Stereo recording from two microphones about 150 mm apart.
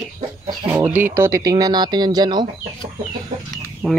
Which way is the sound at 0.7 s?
15° right (ahead or behind).